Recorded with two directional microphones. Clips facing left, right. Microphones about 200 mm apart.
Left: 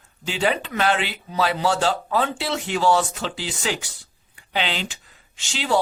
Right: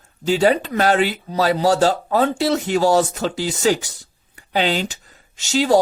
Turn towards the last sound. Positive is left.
turn(degrees=-40)  # may be behind; listen again after turning